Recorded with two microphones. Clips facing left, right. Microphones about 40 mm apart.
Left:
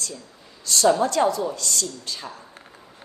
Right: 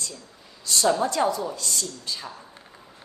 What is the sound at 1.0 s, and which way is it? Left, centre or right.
A woman's voice, left.